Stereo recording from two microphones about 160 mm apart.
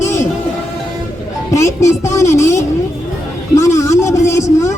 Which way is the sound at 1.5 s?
20° left (ahead or behind).